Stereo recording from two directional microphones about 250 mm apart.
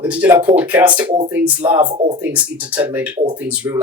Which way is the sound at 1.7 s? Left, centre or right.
Centre.